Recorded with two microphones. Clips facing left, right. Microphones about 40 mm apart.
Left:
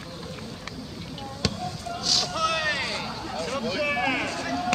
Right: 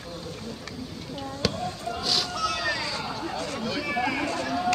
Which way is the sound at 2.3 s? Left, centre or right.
Left.